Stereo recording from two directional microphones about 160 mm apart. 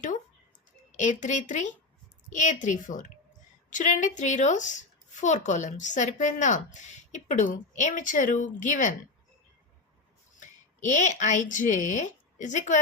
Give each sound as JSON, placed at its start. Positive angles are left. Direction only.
{"t": 0.9, "sound": "speech", "side_deg": 50}
{"t": 10.4, "sound": "speech", "side_deg": 50}